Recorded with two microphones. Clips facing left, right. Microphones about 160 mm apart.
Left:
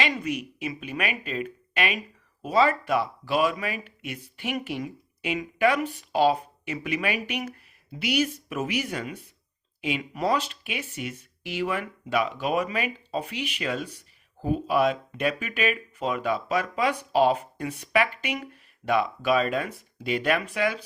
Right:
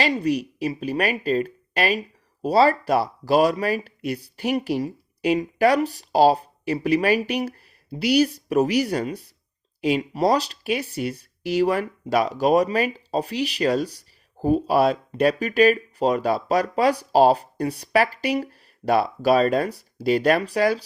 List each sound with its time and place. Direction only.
0.0 s speech: 35° right (ahead or behind)